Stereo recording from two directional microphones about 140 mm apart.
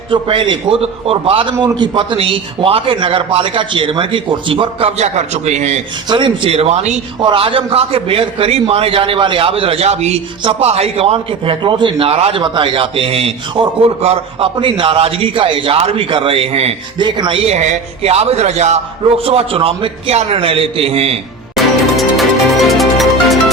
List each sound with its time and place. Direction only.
0.1 s a man's voice: 35° right (ahead or behind)
4.9 s a man's voice: 55° right (ahead or behind)
6.1 s a man's voice: 35° right (ahead or behind); by 6.9 s 50° right (ahead or behind)
7.2 s a man's voice: 35° right (ahead or behind)
17.0 s a man's voice: 35° right (ahead or behind)
21.5 s music: centre (ahead or behind)